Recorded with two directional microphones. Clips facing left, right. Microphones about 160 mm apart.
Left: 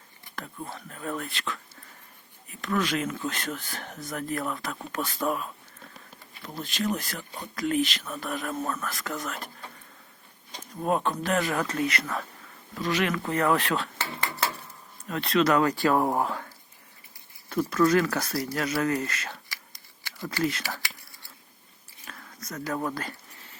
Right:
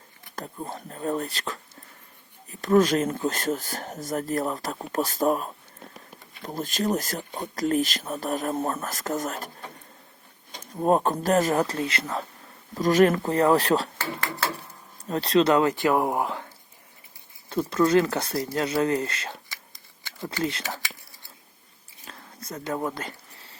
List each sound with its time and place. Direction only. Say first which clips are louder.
0.3 s speech: right 3 dB; 35° right (ahead or behind)
10.6 s speech: right 5 dB; 40° right (ahead or behind)
12.7 s speech: right 8 dB; 45° right (ahead or behind)
15.0 s speech: right 3 dB; 35° right (ahead or behind); by 16.5 s 15° right (ahead or behind)
17.5 s speech: right 2 dB; 30° right (ahead or behind)
22.0 s a sound: right 2 dB; 25° right (ahead or behind)
22.9 s speech: even; 20° right (ahead or behind)